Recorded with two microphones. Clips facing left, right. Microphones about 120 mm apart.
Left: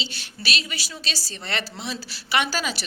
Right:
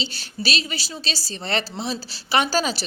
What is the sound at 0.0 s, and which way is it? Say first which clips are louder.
Speech: right 5 dB; 35° right (ahead or behind).